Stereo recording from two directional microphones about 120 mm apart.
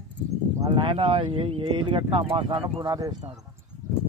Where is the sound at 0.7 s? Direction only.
45° right (ahead or behind).